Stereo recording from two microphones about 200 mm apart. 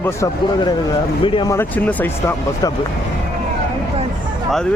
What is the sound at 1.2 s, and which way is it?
Speech, 20° left (ahead or behind).